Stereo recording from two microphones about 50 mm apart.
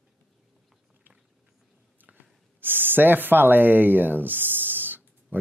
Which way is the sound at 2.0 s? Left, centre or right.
Right.